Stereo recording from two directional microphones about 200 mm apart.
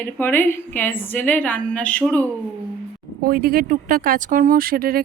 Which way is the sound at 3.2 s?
45° right (ahead or behind).